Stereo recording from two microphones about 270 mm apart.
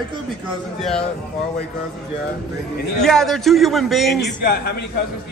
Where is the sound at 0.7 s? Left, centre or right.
Centre.